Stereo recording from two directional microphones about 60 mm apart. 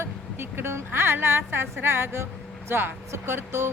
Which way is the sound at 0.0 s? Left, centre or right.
Right.